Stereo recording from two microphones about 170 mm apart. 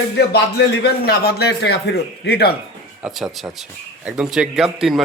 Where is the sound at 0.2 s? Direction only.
75° left (ahead or behind).